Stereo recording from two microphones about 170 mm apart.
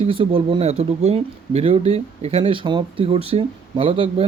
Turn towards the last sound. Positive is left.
turn(degrees=-30)  # may be behind; listen again after turning